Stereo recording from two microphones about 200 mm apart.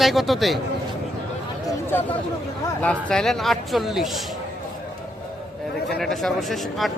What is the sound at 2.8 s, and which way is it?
Speech, 5° left (ahead or behind).